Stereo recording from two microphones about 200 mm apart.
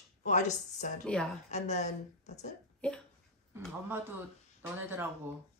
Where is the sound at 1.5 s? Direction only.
35° left (ahead or behind).